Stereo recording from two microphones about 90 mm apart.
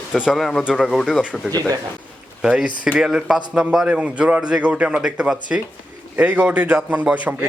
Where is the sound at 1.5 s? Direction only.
20° left (ahead or behind).